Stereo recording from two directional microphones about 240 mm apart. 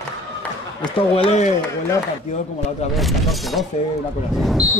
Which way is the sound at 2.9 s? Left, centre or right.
Centre.